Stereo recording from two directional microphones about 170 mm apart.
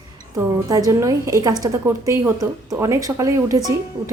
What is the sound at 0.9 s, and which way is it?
Speech, 15° right (ahead or behind).